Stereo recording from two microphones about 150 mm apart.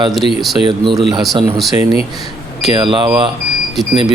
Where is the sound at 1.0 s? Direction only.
30° right (ahead or behind).